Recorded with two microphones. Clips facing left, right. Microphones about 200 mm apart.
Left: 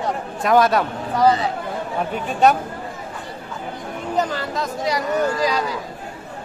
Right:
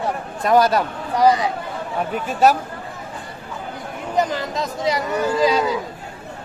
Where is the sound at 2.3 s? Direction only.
Centre (ahead or behind).